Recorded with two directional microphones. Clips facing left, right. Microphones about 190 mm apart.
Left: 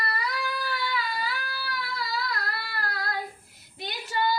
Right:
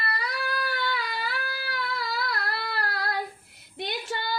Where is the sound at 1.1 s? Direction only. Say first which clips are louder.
Even; 60° right (ahead or behind).